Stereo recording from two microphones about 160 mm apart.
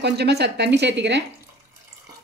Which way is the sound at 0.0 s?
90° right.